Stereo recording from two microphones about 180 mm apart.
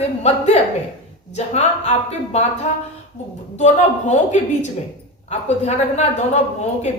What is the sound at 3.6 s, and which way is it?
Speech, 40° left (ahead or behind).